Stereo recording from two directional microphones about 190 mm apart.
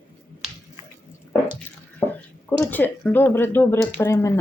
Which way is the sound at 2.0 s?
10° left (ahead or behind).